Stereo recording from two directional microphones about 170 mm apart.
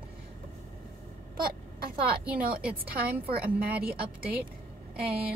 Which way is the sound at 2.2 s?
5° right (ahead or behind).